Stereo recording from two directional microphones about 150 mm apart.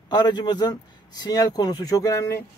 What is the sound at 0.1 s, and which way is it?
A man's voice, 30° left (ahead or behind).